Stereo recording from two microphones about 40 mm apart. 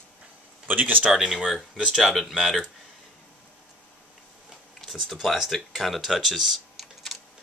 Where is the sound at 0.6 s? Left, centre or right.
Right.